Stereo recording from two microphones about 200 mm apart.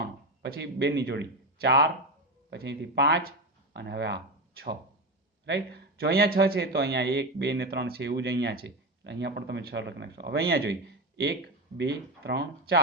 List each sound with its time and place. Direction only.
0.4 s a man's voice: 55° right (ahead or behind)
11.8 s speech: 55° right (ahead or behind)